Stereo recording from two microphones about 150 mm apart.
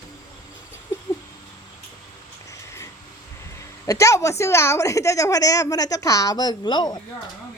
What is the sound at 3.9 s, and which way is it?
A woman's voice, 20° left (ahead or behind).